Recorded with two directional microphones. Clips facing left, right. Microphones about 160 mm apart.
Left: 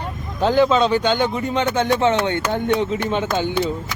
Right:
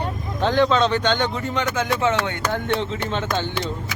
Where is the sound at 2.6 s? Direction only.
15° left (ahead or behind).